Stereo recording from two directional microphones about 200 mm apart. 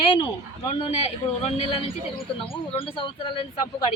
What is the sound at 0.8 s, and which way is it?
A man's voice, 30° left (ahead or behind).